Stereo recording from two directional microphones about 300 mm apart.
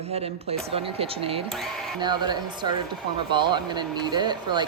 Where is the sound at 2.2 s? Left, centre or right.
Centre.